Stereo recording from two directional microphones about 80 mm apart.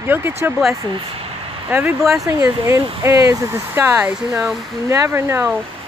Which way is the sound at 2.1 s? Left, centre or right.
Right.